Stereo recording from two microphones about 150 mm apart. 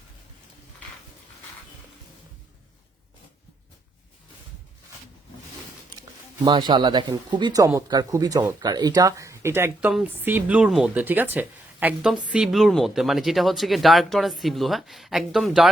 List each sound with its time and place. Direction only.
6.0 s speech: 30° right (ahead or behind); by 15.7 s centre (ahead or behind)